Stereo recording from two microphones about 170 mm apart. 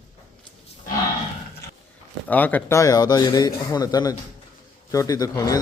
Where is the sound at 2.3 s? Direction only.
10° left (ahead or behind).